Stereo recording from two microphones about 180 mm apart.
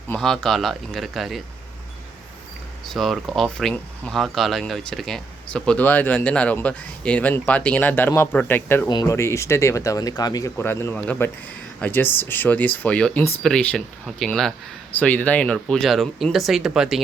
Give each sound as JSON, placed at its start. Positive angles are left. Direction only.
{"t": 0.1, "sound": "speech", "side_deg": 0}
{"t": 2.8, "sound": "speech", "side_deg": 0}